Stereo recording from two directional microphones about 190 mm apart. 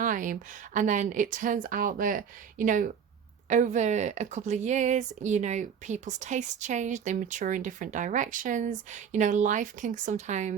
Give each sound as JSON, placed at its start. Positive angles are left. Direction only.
{"t": 0.0, "sound": "a woman's voice", "side_deg": -45}